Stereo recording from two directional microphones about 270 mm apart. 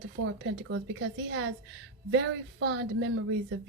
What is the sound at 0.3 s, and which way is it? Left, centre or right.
A woman's voice, right.